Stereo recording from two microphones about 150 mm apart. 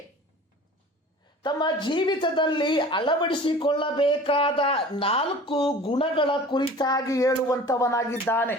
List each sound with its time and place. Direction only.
1.4 s a woman's voice: 30° left (ahead or behind); by 8.5 s 15° left (ahead or behind)